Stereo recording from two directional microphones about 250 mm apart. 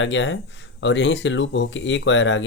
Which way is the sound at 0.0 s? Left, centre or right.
Left.